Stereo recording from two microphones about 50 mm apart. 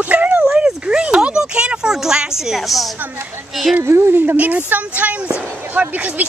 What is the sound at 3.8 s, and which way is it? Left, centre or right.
Speech, right.